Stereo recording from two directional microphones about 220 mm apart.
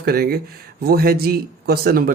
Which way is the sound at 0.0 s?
45° right (ahead or behind).